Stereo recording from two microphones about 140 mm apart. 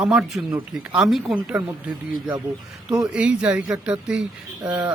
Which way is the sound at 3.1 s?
10° right (ahead or behind).